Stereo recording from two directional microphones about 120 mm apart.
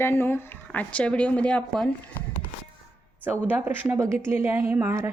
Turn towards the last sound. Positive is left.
turn(degrees=-20)  # may be behind; listen again after turning